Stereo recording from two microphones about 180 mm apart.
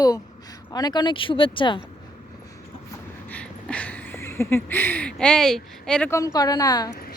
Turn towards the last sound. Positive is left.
turn(degrees=20)  # may be behind; listen again after turning